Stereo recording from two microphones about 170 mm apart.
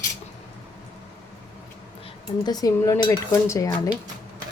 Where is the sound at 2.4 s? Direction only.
20° left (ahead or behind).